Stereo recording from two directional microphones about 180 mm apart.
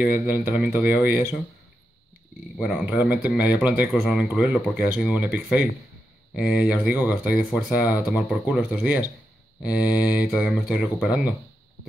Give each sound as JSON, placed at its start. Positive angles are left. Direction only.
{"t": 0.0, "sound": "speech", "side_deg": -5}
{"t": 2.6, "sound": "speech", "side_deg": -5}